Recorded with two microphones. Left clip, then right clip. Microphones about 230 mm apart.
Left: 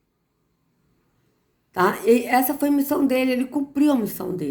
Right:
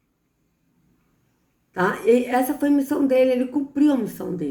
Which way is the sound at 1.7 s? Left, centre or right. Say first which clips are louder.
Even; left.